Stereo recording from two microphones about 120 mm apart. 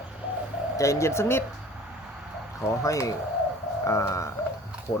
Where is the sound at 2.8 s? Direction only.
25° left (ahead or behind).